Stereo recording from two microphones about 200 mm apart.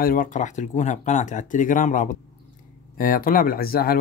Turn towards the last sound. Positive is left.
turn(degrees=50)  # may be behind; listen again after turning